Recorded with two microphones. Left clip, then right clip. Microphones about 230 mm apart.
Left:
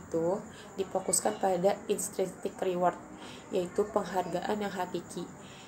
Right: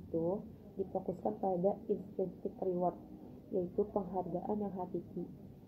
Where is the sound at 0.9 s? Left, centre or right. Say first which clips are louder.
Left 8 dB; left.